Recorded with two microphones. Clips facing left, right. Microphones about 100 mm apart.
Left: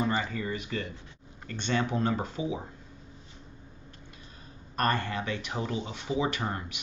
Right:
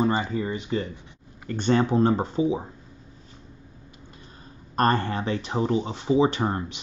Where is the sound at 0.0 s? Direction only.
25° right (ahead or behind).